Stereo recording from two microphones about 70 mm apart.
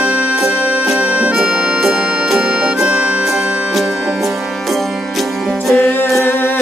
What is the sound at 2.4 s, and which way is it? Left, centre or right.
Music, centre.